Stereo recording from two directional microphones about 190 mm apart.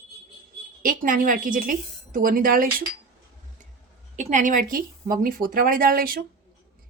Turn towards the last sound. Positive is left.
turn(degrees=-50)  # may be behind; listen again after turning